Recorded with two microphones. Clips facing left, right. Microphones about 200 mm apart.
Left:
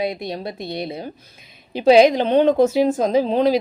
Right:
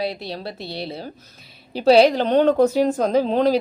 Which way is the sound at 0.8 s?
15° left (ahead or behind).